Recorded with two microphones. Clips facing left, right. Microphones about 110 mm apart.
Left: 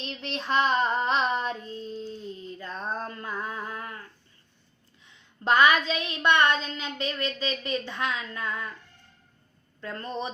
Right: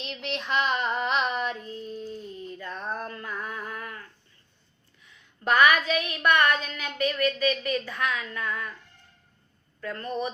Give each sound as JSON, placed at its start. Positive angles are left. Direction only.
{"t": 0.0, "sound": "child singing", "side_deg": 35}
{"t": 2.6, "sound": "a sound", "side_deg": 25}
{"t": 5.0, "sound": "a woman's voice", "side_deg": 25}
{"t": 9.8, "sound": "a woman's voice", "side_deg": 25}